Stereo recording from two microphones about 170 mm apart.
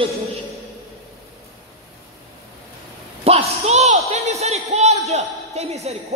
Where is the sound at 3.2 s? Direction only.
40° right (ahead or behind).